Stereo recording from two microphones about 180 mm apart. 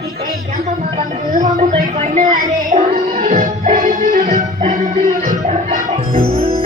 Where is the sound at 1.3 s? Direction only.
45° right (ahead or behind).